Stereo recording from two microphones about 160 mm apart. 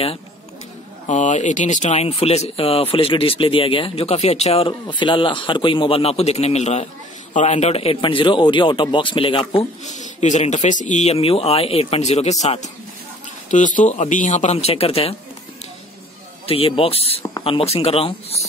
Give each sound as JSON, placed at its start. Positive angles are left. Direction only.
{"t": 1.0, "sound": "speech", "side_deg": 50}
{"t": 9.8, "sound": "speech", "side_deg": 50}
{"t": 16.4, "sound": "speech", "side_deg": 35}